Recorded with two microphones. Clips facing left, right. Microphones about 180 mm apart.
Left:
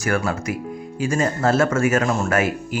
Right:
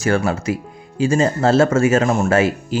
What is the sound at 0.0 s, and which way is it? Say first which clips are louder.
Speech: right 4 dB; 25° right (ahead or behind).